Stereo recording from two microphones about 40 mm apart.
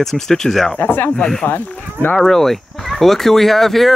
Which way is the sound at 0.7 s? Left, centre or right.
Left.